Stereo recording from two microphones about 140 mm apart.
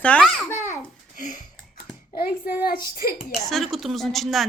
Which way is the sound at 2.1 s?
90° left.